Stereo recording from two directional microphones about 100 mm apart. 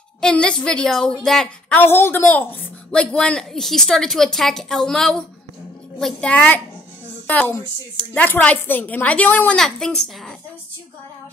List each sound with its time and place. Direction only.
0.2 s a woman's voice: 10° left (ahead or behind)
1.8 s a woman's voice: 20° left (ahead or behind)
2.9 s a woman's voice: 10° left (ahead or behind)
9.6 s a woman's voice: 5° left (ahead or behind)